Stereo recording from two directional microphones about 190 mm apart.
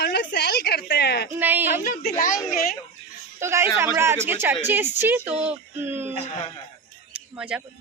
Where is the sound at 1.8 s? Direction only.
45° left (ahead or behind).